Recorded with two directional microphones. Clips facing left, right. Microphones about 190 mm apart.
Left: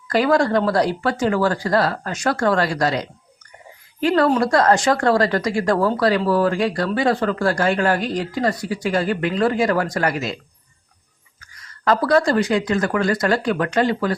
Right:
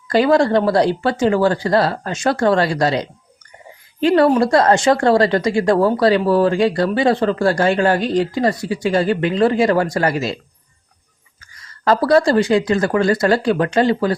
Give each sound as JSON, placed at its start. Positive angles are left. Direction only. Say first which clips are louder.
{"t": 0.1, "sound": "speech", "louder": "right 3 dB", "side_deg": -25}
{"t": 11.9, "sound": "speech", "louder": "right 3 dB", "side_deg": -30}